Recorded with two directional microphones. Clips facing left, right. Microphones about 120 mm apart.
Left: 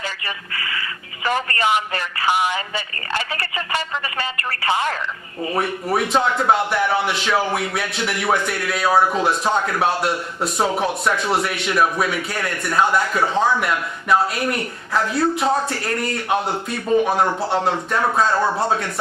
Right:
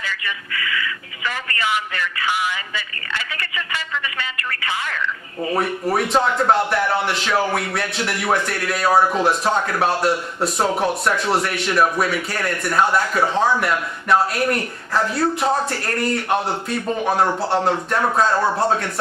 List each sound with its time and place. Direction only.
0.0 s speech: 35° left (ahead or behind)
5.5 s speech: centre (ahead or behind)